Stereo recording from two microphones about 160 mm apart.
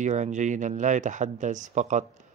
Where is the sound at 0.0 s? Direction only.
50° right (ahead or behind).